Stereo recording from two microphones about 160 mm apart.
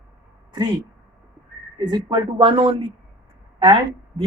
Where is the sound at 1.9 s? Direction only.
25° right (ahead or behind).